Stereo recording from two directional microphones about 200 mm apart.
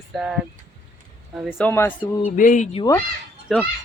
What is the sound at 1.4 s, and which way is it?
Speech, 10° left (ahead or behind).